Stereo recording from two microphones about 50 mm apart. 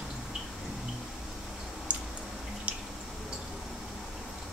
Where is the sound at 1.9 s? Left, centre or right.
Right.